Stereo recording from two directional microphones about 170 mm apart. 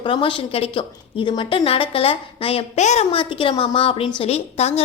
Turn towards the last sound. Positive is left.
turn(degrees=35)  # may be behind; listen again after turning